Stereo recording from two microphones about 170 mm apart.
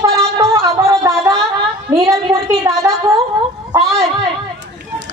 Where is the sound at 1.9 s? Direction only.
20° right (ahead or behind).